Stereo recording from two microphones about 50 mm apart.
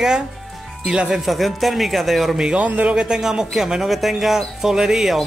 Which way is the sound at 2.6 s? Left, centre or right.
Right.